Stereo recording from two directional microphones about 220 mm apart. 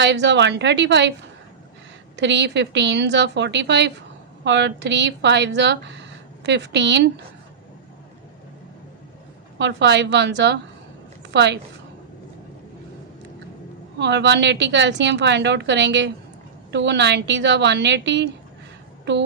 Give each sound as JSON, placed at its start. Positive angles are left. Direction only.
{"t": 0.0, "sound": "a woman's voice", "side_deg": -55}
{"t": 2.1, "sound": "a woman's voice", "side_deg": -55}
{"t": 9.6, "sound": "a woman's voice", "side_deg": -55}
{"t": 14.0, "sound": "a woman's voice", "side_deg": -55}